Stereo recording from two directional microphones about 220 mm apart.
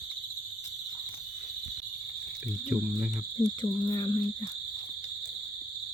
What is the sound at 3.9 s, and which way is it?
Speech, 20° left (ahead or behind).